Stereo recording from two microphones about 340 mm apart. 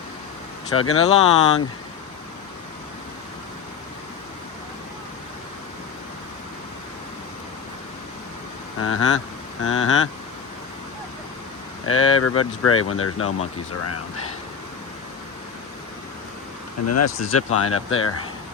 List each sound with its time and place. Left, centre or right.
0.7 s speech: left
8.8 s speech: left
11.9 s speech: left
16.9 s speech: left